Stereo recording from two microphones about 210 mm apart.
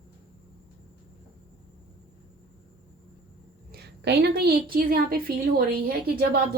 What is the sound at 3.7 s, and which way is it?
A woman's voice, 50° right (ahead or behind).